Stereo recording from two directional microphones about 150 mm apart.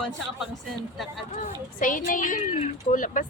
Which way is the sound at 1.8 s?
65° left (ahead or behind).